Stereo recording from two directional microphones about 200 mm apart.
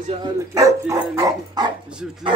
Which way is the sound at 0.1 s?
20° right (ahead or behind).